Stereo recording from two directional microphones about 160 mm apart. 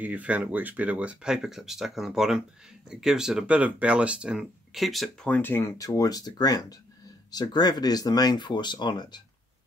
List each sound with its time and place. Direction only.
0.0 s speech: 10° right (ahead or behind); by 9.2 s 25° left (ahead or behind)